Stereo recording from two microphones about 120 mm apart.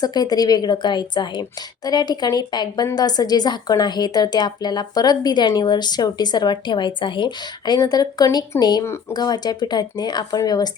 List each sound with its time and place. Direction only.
0.0 s a woman's voice: 35° left (ahead or behind)
8.8 s speech: 20° left (ahead or behind)
9.1 s a woman's voice: 35° left (ahead or behind)